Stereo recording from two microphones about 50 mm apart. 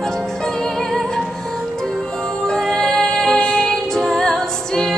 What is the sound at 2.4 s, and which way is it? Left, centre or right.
Music, centre.